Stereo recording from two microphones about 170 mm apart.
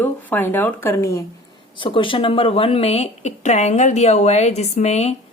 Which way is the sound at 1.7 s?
30° left (ahead or behind).